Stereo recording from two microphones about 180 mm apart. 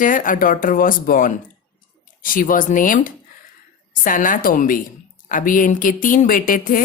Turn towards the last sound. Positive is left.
turn(degrees=50)  # may be behind; listen again after turning